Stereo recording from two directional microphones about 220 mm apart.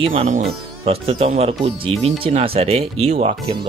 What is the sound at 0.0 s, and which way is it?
Speech, 25° right (ahead or behind).